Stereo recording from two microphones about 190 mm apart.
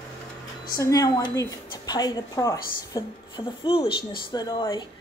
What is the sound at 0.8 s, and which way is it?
A woman's voice, 20° left (ahead or behind).